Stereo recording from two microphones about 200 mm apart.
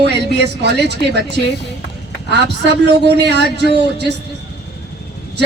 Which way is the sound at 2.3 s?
55° right (ahead or behind).